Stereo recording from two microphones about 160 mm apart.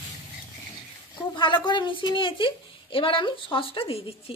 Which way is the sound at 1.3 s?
30° left (ahead or behind).